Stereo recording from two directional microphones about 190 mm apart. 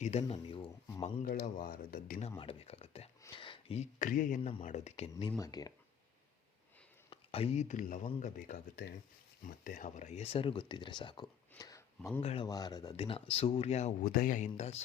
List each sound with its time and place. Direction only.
0.0 s speech: 35° left (ahead or behind)
1.2 s speech: 50° left (ahead or behind)
2.4 s a sound: 30° left (ahead or behind)
3.2 s speech: 25° left (ahead or behind)
5.4 s speech: 20° left (ahead or behind)
7.1 s speech: 30° left (ahead or behind)
12.2 s speech: 30° left (ahead or behind)
12.5 s speech: 20° left (ahead or behind); by 14.8 s 35° left (ahead or behind)